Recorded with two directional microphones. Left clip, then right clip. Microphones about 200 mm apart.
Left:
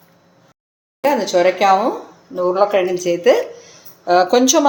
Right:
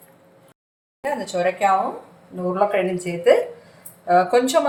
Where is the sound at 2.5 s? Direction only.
50° left (ahead or behind).